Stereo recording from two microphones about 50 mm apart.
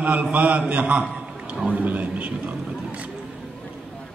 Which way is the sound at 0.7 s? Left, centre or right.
Right.